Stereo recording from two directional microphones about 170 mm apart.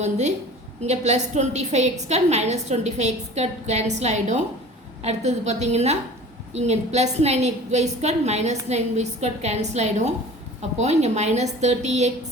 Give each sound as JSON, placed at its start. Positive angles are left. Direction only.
{"t": 0.0, "sound": "a woman's voice", "side_deg": -40}